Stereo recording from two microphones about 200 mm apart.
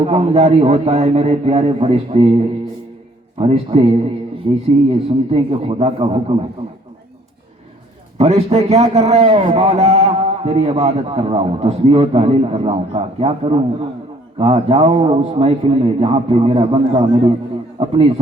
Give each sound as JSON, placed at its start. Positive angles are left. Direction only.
{"t": 0.0, "sound": "a man's voice", "side_deg": -30}
{"t": 8.2, "sound": "a man's voice", "side_deg": -30}